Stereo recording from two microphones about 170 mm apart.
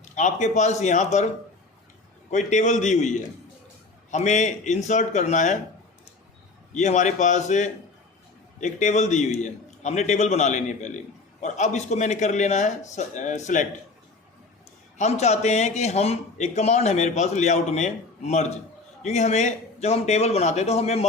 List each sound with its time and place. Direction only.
0.0 s a man's voice: 45° left (ahead or behind)
2.3 s a man's voice: 45° left (ahead or behind)
6.7 s a man's voice: 45° left (ahead or behind)
14.9 s speech: 40° left (ahead or behind)